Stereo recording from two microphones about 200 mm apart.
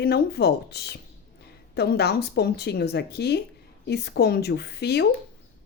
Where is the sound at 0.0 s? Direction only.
55° left (ahead or behind).